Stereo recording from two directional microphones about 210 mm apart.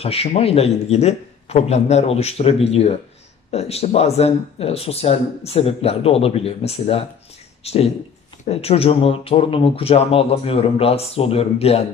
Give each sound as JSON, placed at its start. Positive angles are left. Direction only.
{"t": 0.0, "sound": "speech", "side_deg": 30}